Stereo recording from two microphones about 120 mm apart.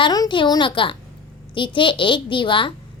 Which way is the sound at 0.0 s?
35° left (ahead or behind).